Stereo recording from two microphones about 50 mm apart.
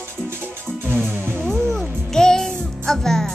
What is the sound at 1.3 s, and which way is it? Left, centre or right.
Music, centre.